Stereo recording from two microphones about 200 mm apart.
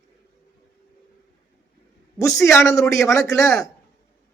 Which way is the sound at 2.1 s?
15° left (ahead or behind).